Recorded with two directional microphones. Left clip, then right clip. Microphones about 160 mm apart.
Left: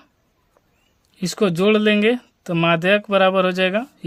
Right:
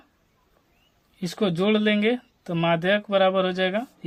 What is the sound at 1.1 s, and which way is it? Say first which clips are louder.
Speech: left 5 dB; 50° left (ahead or behind).